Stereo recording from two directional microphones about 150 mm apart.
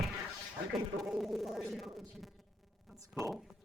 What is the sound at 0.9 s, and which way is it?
Speech, centre (ahead or behind).